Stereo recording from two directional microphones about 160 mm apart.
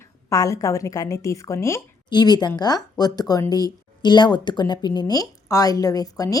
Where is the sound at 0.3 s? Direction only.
20° left (ahead or behind).